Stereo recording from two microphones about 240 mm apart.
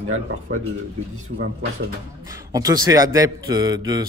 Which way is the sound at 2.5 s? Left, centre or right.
Centre.